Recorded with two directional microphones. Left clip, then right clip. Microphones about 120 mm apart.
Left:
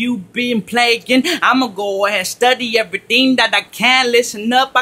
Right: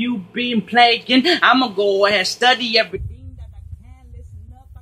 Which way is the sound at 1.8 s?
30° left (ahead or behind).